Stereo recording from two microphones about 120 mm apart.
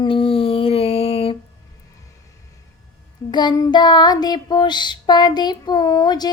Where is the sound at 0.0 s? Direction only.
50° left (ahead or behind).